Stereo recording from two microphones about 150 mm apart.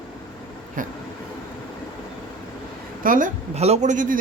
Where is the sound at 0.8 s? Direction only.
65° right (ahead or behind).